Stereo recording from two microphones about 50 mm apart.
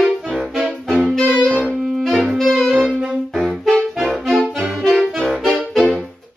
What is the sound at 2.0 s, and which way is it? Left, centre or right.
Saxophone, centre.